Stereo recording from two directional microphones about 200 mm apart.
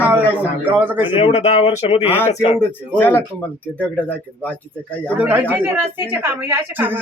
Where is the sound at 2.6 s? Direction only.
10° left (ahead or behind).